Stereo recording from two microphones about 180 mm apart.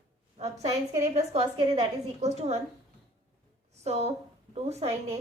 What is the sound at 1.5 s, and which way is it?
Speech, 25° right (ahead or behind).